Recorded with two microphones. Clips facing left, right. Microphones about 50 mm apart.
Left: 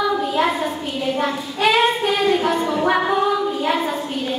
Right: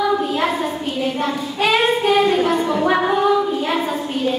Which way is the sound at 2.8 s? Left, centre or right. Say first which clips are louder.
Even; centre.